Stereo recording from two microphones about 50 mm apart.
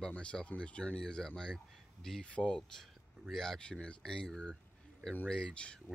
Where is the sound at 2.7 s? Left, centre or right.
Centre.